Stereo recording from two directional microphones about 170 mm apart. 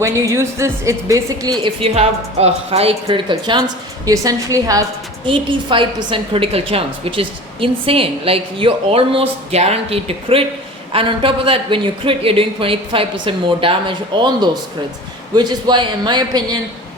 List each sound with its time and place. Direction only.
0.0 s a woman's voice: 15° right (ahead or behind)
5.2 s a woman's voice: 30° right (ahead or behind)